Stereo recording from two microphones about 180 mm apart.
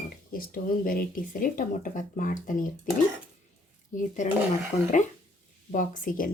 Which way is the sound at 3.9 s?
45° left (ahead or behind).